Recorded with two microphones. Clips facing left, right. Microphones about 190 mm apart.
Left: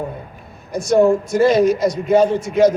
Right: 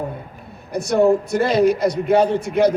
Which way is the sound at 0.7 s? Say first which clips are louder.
Left 2 dB; 60° right (ahead or behind).